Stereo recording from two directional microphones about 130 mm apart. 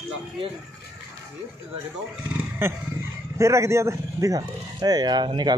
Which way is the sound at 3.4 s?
20° right (ahead or behind).